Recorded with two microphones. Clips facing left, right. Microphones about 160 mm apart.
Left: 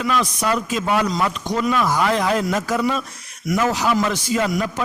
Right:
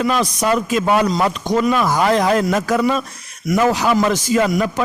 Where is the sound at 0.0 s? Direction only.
40° right (ahead or behind).